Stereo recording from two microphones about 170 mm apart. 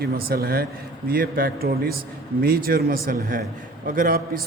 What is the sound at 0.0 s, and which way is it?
A man's voice, 60° right (ahead or behind).